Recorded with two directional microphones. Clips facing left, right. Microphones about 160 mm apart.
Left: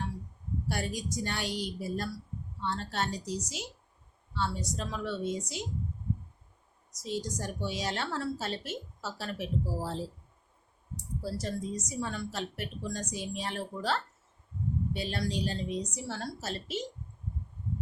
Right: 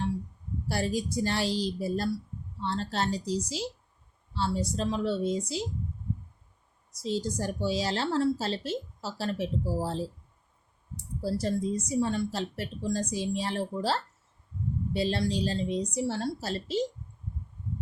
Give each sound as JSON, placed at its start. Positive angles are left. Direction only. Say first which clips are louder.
{"t": 0.7, "sound": "a woman's voice", "louder": "right 6 dB", "side_deg": -30}
{"t": 7.0, "sound": "a woman's voice", "louder": "right 5 dB", "side_deg": -30}